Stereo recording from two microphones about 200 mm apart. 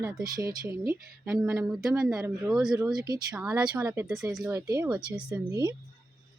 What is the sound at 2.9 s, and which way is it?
Speech, 20° right (ahead or behind).